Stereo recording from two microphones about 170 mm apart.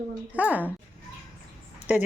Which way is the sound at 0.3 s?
10° right (ahead or behind).